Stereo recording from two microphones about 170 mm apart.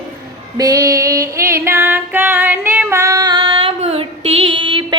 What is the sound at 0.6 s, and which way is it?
Music, 20° right (ahead or behind).